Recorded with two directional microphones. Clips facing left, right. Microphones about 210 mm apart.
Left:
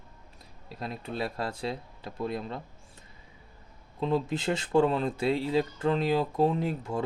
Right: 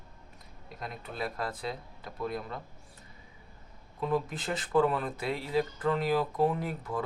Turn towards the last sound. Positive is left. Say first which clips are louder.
# left 4 dB
turn(degrees=25)  # may be behind; listen again after turning